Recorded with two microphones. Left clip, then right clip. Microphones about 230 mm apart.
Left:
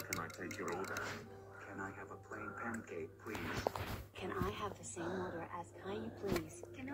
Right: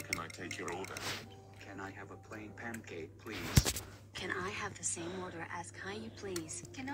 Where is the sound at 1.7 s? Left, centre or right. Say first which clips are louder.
Right 1 dB; right.